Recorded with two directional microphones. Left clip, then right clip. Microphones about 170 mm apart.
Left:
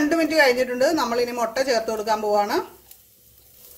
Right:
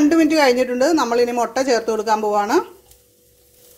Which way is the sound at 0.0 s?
35° right (ahead or behind).